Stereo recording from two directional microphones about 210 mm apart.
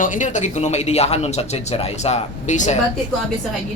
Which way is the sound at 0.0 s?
40° left (ahead or behind).